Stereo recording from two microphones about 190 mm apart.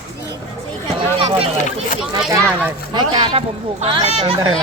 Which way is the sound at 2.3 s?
15° right (ahead or behind).